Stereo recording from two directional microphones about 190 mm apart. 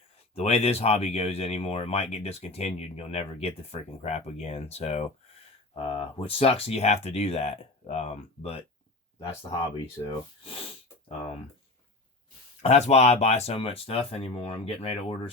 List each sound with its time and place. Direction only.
0.3 s speech: 30° left (ahead or behind)
10.0 s speech: 30° left (ahead or behind)
12.6 s speech: 35° left (ahead or behind)